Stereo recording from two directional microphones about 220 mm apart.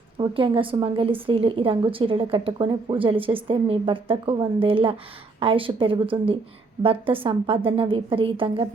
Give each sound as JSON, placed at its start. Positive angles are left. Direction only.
{"t": 0.2, "sound": "speech", "side_deg": -20}